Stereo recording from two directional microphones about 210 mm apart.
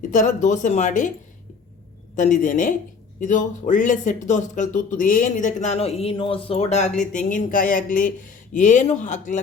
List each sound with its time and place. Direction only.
0.1 s speech: 35° left (ahead or behind)
2.1 s speech: 35° left (ahead or behind)